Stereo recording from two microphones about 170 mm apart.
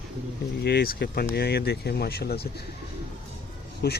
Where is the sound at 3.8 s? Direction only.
70° left (ahead or behind).